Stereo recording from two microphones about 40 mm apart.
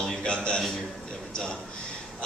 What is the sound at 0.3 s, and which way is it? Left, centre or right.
Speech, left.